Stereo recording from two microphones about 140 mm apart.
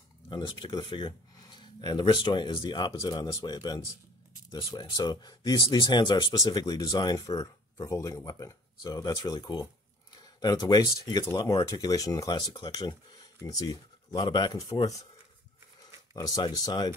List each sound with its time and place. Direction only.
0.3 s speech: 30° left (ahead or behind)
16.1 s speech: 25° left (ahead or behind)